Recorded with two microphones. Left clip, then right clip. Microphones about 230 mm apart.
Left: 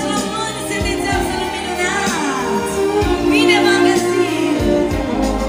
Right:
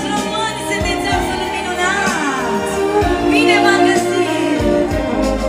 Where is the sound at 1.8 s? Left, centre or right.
Centre.